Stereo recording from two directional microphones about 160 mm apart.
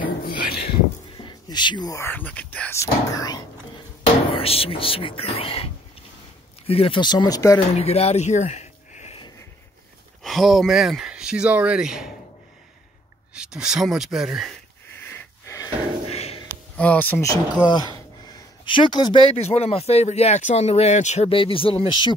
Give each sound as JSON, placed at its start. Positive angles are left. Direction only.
{"t": 0.2, "sound": "a sound", "side_deg": 65}
{"t": 1.1, "sound": "speech", "side_deg": 30}
{"t": 2.8, "sound": "speech", "side_deg": 25}
{"t": 4.3, "sound": "speech", "side_deg": 35}
{"t": 7.7, "sound": "speech", "side_deg": 40}
{"t": 10.2, "sound": "speech", "side_deg": 0}
{"t": 13.3, "sound": "speech", "side_deg": -5}
{"t": 15.0, "sound": "wheeze", "side_deg": 15}
{"t": 16.1, "sound": "a sound", "side_deg": 40}
{"t": 16.7, "sound": "speech", "side_deg": 10}